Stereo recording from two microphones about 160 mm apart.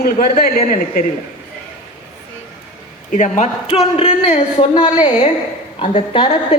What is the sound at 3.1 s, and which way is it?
Speech, 50° left (ahead or behind).